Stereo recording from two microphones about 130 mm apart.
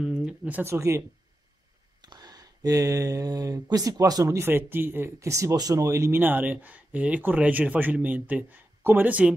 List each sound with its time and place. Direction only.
0.0 s speech: 5° right (ahead or behind)